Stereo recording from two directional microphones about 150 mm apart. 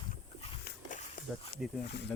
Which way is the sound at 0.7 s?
85° left.